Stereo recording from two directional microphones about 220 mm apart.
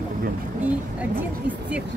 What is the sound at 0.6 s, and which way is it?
Speech, 5° right (ahead or behind).